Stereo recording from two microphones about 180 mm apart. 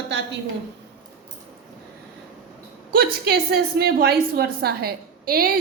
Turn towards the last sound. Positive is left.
turn(degrees=-55)  # may be behind; listen again after turning